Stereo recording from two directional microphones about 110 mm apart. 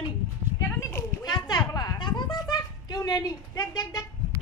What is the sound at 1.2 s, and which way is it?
Speech, 40° left (ahead or behind).